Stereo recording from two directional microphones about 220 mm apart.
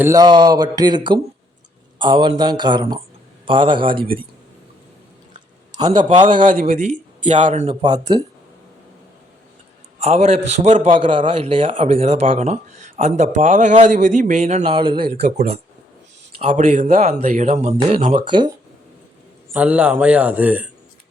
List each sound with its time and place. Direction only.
0.0 s a man's voice: 15° right (ahead or behind)
5.7 s a man's voice: 20° right (ahead or behind)
6.4 s speech: 35° right (ahead or behind); by 8.2 s 20° right (ahead or behind)
10.0 s a man's voice: 30° right (ahead or behind)
11.3 s a man's voice: 25° right (ahead or behind)
19.5 s speech: 5° right (ahead or behind)